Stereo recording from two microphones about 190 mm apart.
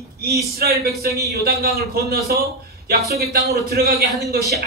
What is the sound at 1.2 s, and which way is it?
A man's voice, 55° right (ahead or behind).